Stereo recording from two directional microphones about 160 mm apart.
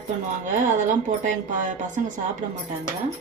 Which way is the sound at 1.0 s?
50° right (ahead or behind).